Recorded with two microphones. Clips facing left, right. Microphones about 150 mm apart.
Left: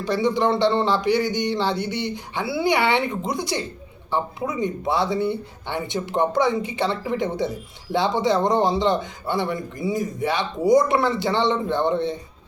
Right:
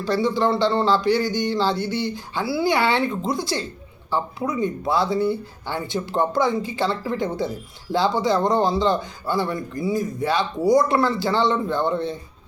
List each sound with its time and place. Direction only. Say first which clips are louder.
0.0 s speech: even; 20° left (ahead or behind)